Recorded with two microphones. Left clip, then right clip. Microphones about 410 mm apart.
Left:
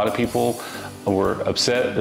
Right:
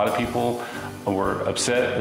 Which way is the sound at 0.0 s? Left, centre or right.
Left.